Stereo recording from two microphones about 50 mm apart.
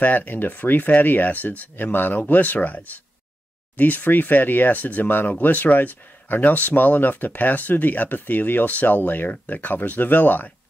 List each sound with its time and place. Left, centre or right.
0.0 s speech: left